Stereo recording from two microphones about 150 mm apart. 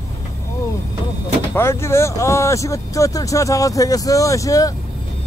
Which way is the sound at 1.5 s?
15° left (ahead or behind).